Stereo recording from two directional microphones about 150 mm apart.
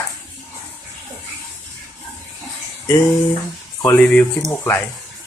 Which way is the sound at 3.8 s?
10° left (ahead or behind).